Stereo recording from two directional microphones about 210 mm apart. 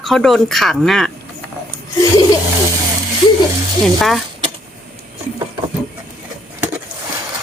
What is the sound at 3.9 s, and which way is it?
Speech, centre (ahead or behind).